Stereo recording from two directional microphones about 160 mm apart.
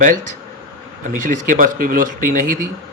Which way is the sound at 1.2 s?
60° right (ahead or behind).